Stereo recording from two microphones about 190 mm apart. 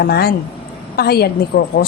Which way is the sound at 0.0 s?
55° left (ahead or behind).